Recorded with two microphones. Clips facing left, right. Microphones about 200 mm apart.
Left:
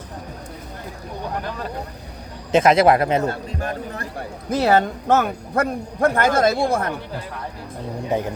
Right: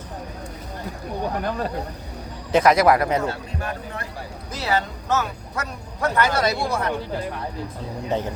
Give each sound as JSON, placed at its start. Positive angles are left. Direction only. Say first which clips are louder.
{"t": 2.5, "sound": "speech", "louder": "left 2 dB", "side_deg": 25}
{"t": 3.2, "sound": "a man's voice", "louder": "left 3 dB", "side_deg": 40}
{"t": 4.4, "sound": "speech", "louder": "left 8 dB", "side_deg": 55}
{"t": 8.1, "sound": "speech", "louder": "left 2 dB", "side_deg": 15}